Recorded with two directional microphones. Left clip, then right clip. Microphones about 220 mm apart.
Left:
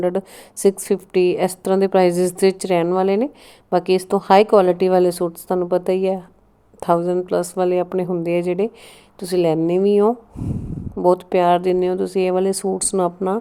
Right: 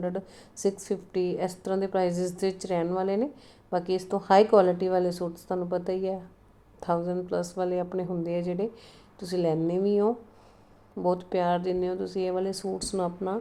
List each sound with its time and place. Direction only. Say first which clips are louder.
0.0 s a woman's voice: left 12 dB; 40° left (ahead or behind)